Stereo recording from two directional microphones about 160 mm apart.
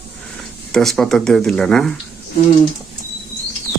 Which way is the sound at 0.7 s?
Centre (ahead or behind).